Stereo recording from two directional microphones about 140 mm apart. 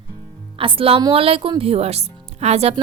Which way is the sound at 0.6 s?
40° right (ahead or behind).